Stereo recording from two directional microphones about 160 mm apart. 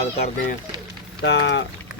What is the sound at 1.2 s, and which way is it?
Speech, 90° left.